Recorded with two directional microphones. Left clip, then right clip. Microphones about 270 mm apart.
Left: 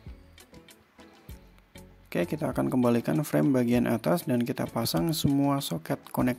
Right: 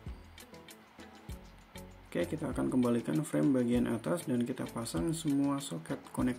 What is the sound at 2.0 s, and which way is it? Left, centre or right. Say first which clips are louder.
Speech: left 6 dB; left.